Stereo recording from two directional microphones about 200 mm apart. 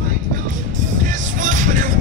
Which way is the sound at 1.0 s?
40° right (ahead or behind).